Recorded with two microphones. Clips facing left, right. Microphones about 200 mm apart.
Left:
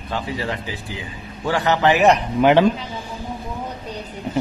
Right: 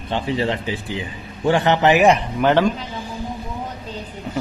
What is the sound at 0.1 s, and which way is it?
A man's voice, 25° right (ahead or behind).